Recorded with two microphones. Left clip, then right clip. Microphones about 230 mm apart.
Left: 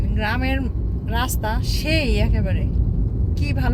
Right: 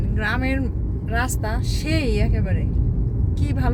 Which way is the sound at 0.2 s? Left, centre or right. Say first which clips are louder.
Even; centre.